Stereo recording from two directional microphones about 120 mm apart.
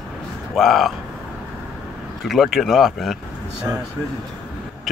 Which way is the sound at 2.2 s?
Centre (ahead or behind).